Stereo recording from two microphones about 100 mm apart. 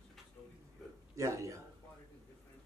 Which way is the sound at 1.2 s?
35° right (ahead or behind).